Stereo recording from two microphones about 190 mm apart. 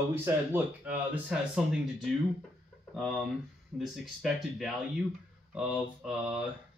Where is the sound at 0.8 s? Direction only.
5° right (ahead or behind).